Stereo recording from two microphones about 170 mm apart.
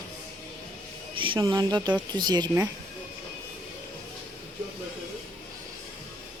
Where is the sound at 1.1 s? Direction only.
30° right (ahead or behind).